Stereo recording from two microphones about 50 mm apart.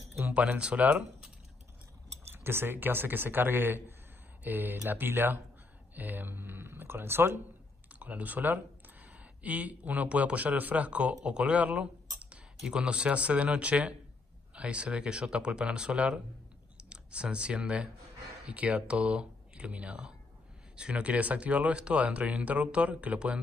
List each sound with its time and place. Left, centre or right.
0.3 s speech: right
2.3 s speech: right
7.9 s speech: right